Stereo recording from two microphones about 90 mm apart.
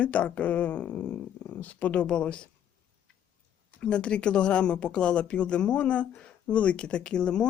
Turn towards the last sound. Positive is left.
turn(degrees=10)  # may be behind; listen again after turning